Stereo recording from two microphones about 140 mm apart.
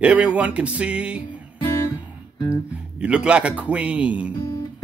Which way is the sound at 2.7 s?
10° right (ahead or behind).